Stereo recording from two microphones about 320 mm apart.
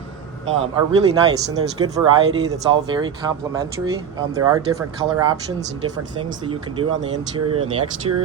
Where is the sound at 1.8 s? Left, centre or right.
Centre.